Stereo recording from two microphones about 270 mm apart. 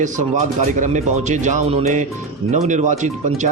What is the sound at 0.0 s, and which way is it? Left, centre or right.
Speech, right.